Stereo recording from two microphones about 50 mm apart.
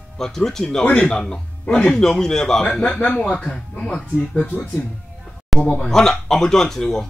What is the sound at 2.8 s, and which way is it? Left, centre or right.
Speech, left.